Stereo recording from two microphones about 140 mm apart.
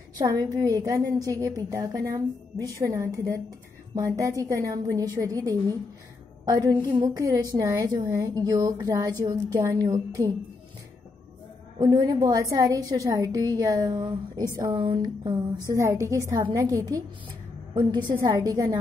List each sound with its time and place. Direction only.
0.2 s a woman's voice: 25° right (ahead or behind)
11.8 s a woman's voice: 30° right (ahead or behind)